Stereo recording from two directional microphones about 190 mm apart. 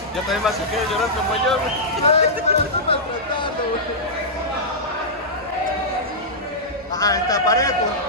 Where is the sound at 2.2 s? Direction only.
35° left (ahead or behind).